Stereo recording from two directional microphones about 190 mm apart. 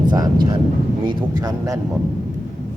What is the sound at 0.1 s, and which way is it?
Speech, 20° right (ahead or behind).